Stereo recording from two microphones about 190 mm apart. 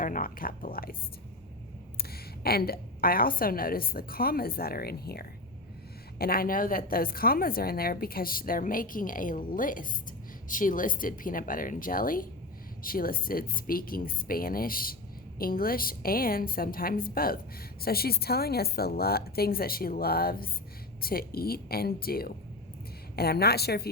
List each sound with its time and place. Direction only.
0.0 s a woman's voice: 45° left (ahead or behind)
2.0 s a woman's voice: 55° left (ahead or behind)